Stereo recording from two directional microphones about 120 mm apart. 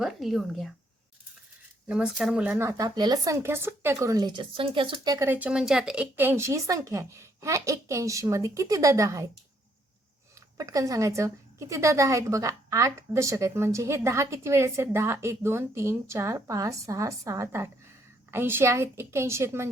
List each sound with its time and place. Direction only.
0.0 s speech: centre (ahead or behind)
1.9 s speech: 5° right (ahead or behind)
2.6 s speech: 30° right (ahead or behind)
5.1 s a woman's voice: 25° right (ahead or behind)
5.4 s a woman's voice: 5° right (ahead or behind); by 9.3 s 25° right (ahead or behind)
10.6 s a woman's voice: 30° right (ahead or behind)